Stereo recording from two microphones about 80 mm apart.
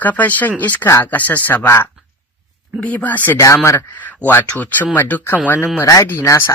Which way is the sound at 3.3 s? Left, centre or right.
Left.